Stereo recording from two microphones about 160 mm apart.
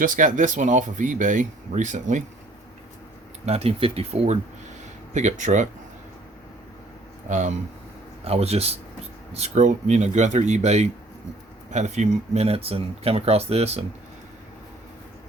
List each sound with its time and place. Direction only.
0.0 s speech: 55° right (ahead or behind)
3.4 s speech: 40° right (ahead or behind)
7.3 s speech: 45° right (ahead or behind)